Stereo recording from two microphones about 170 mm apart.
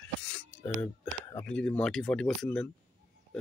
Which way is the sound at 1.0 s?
10° left (ahead or behind).